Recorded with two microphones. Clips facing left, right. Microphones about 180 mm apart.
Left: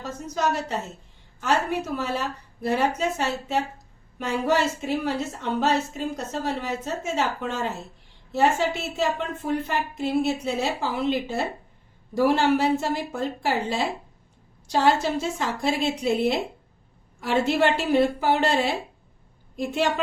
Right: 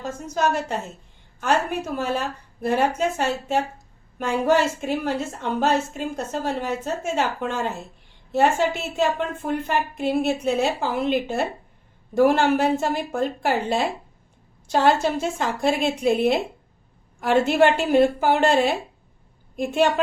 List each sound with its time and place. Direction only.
0.0 s a woman's voice: 50° right (ahead or behind)